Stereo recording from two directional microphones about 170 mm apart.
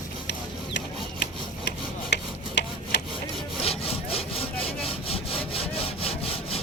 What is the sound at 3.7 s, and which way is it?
Sawing, 35° left (ahead or behind).